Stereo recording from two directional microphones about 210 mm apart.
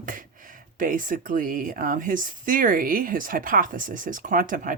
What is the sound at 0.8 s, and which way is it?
Speech, 40° right (ahead or behind).